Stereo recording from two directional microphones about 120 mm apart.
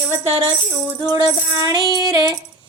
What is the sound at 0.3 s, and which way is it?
Music, 50° right (ahead or behind).